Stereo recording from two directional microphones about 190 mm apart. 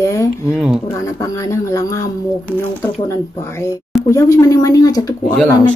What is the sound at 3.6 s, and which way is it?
Speech, 15° left (ahead or behind).